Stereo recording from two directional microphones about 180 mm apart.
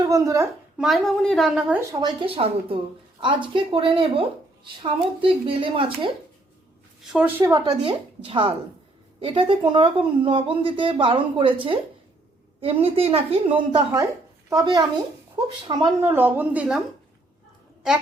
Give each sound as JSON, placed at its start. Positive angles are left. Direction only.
{"t": 0.0, "sound": "a child's voice", "side_deg": -20}
{"t": 0.8, "sound": "a woman's voice", "side_deg": 0}
{"t": 1.9, "sound": "a woman's voice", "side_deg": -20}
{"t": 7.1, "sound": "a woman's voice", "side_deg": -10}
{"t": 7.7, "sound": "a woman's voice", "side_deg": -30}
{"t": 14.5, "sound": "a woman's voice", "side_deg": -20}
{"t": 16.0, "sound": "a woman's voice", "side_deg": -10}